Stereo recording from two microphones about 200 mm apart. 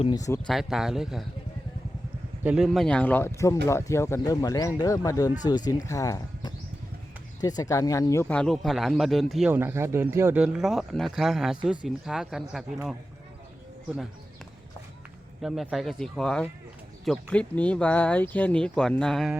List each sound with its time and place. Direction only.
0.0 s speech: 20° left (ahead or behind)
0.4 s speech: centre (ahead or behind)
2.4 s speech: 5° right (ahead or behind)
9.5 s speech: 10° right (ahead or behind)
15.4 s speech: centre (ahead or behind)